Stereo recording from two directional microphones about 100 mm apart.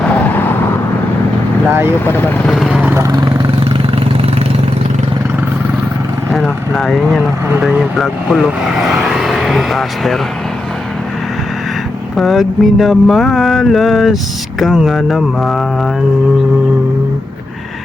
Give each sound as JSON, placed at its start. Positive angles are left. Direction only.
{"t": 0.0, "sound": "vehicle", "side_deg": 15}
{"t": 2.6, "sound": "vehicle", "side_deg": -10}
{"t": 3.6, "sound": "vehicle", "side_deg": -70}
{"t": 6.3, "sound": "speech", "side_deg": 5}
{"t": 12.1, "sound": "speech", "side_deg": 0}